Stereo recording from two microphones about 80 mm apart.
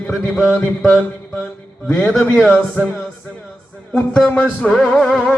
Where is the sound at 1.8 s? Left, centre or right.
Centre.